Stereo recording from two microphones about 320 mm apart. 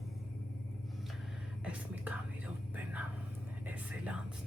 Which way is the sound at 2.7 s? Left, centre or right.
Centre.